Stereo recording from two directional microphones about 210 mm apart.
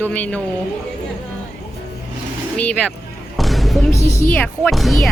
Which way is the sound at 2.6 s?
5° left (ahead or behind).